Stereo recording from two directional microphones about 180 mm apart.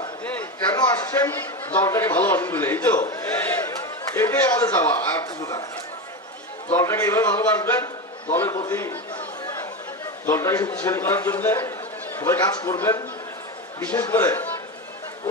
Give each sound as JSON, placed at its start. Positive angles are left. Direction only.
{"t": 0.7, "sound": "a man's voice", "side_deg": 20}
{"t": 6.7, "sound": "a man's voice", "side_deg": 15}
{"t": 10.2, "sound": "a man's voice", "side_deg": 15}